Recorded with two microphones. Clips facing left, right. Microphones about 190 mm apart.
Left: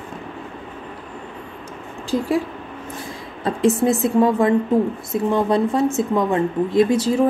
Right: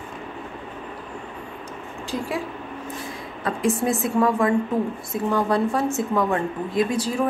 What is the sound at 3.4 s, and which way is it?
Speech, 25° left (ahead or behind).